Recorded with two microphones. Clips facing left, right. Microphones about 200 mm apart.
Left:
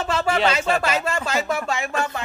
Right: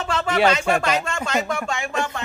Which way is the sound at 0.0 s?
5° left (ahead or behind).